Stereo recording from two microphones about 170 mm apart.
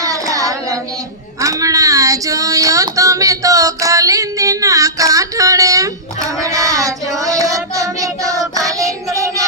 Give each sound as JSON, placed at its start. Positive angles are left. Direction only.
{"t": 0.0, "sound": "child singing", "side_deg": -20}
{"t": 1.4, "sound": "female singing", "side_deg": -20}